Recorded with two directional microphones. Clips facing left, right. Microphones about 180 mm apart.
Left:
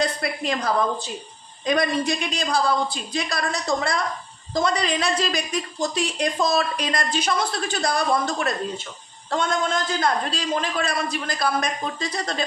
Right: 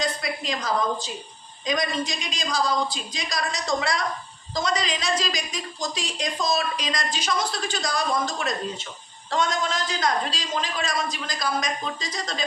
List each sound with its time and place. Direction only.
0.0 s a woman's voice: 60° left (ahead or behind)